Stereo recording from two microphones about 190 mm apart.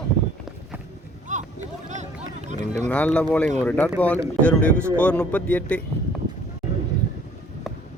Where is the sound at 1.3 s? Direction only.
40° right (ahead or behind).